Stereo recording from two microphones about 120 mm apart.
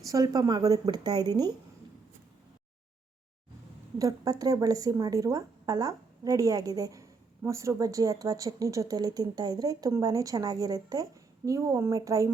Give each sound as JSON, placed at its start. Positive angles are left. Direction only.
{"t": 0.0, "sound": "speech", "side_deg": -30}
{"t": 3.9, "sound": "a woman's voice", "side_deg": -30}